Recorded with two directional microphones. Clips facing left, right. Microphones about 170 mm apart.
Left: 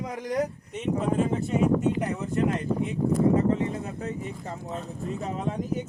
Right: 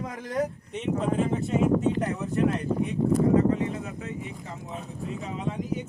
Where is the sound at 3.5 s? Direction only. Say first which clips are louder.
Left 1 dB; 35° left (ahead or behind).